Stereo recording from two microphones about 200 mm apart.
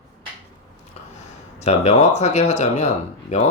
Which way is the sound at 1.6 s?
35° left (ahead or behind).